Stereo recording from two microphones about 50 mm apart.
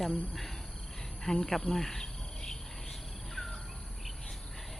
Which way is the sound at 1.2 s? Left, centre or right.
Centre.